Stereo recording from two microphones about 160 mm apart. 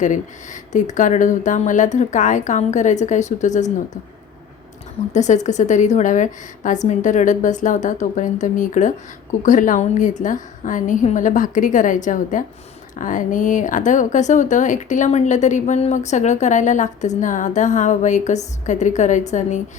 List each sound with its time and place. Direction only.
0.0 s speech: 50° left (ahead or behind)
5.1 s speech: 45° left (ahead or behind)